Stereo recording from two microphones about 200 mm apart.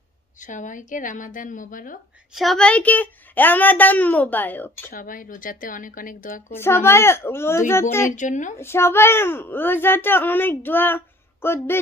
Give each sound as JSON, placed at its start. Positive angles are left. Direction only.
{"t": 0.4, "sound": "a woman's voice", "side_deg": 40}
{"t": 2.3, "sound": "a woman's voice", "side_deg": 0}
{"t": 4.9, "sound": "speech", "side_deg": 45}
{"t": 6.5, "sound": "a woman's voice", "side_deg": 10}
{"t": 8.2, "sound": "a woman's voice", "side_deg": 40}
{"t": 8.5, "sound": "a woman's voice", "side_deg": 10}